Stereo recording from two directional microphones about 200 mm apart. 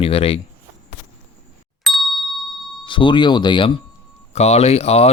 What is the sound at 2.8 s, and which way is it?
Speech, 25° left (ahead or behind).